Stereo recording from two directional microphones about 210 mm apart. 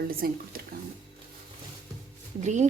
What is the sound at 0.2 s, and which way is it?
Speech, 45° right (ahead or behind).